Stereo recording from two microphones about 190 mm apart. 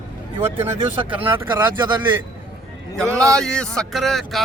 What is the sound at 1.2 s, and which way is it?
Speech, 10° right (ahead or behind).